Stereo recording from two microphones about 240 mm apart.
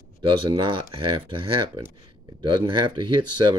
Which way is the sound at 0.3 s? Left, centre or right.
Right.